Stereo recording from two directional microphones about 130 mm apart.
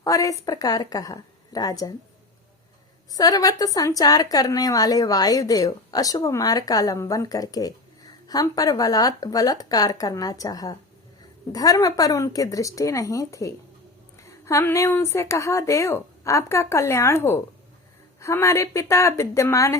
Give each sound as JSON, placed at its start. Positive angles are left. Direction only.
{"t": 0.0, "sound": "a woman's voice", "side_deg": 25}
{"t": 3.1, "sound": "a woman's voice", "side_deg": 30}